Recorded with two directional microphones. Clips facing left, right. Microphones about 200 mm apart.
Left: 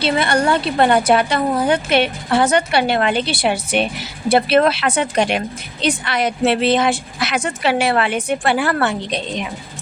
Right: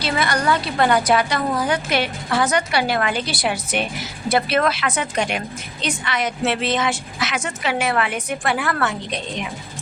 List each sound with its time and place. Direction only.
0.0 s a woman's voice: 25° left (ahead or behind)